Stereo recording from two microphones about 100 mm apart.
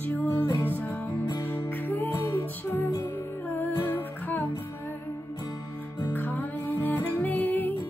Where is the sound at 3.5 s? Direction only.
20° left (ahead or behind).